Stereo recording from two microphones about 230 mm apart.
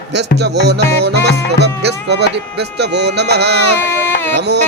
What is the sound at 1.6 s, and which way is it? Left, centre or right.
Speech, right.